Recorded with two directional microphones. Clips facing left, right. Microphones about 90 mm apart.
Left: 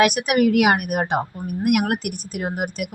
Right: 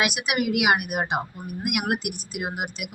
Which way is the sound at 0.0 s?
45° left (ahead or behind).